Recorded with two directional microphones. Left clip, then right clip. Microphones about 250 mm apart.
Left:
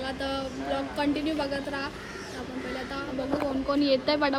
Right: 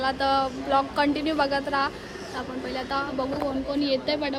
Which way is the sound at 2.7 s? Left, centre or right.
Centre.